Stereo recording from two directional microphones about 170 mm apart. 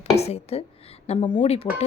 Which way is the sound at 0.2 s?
35° left (ahead or behind).